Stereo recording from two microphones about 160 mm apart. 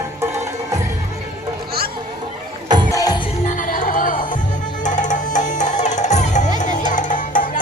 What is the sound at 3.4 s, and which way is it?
Music, 55° left (ahead or behind).